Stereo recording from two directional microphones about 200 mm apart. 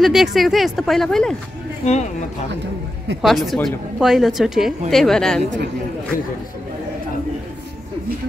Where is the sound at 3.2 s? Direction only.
Centre (ahead or behind).